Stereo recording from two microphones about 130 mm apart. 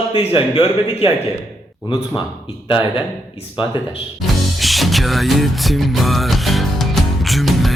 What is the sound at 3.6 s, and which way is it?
Speech, 40° left (ahead or behind).